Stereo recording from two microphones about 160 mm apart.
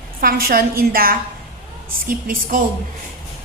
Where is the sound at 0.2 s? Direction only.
65° right (ahead or behind).